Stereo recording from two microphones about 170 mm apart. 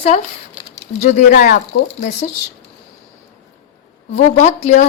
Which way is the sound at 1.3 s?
65° left (ahead or behind).